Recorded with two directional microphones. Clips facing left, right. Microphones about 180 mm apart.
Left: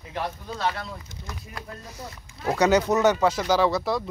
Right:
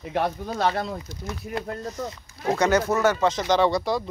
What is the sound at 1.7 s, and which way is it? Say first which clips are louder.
Speech: right 9 dB; 75° right (ahead or behind).